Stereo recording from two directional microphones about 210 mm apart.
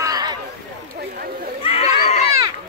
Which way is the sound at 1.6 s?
30° left (ahead or behind).